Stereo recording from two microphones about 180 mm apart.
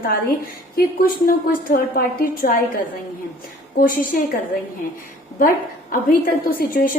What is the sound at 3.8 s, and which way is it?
Speech, 50° left (ahead or behind).